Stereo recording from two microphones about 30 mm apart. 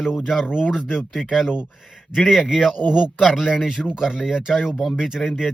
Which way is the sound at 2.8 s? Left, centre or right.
Left.